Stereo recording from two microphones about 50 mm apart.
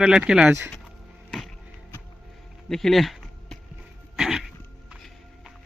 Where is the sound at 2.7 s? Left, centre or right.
Centre.